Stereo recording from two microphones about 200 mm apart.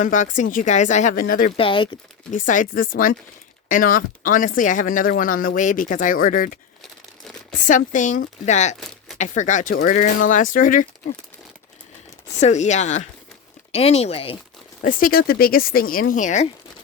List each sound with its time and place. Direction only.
0.0 s speech: 40° left (ahead or behind)
1.5 s speech: 25° left (ahead or behind)
2.3 s speech: 40° left (ahead or behind)
7.7 s speech: 40° left (ahead or behind)
12.4 s speech: 35° left (ahead or behind)
14.8 s speech: 45° left (ahead or behind)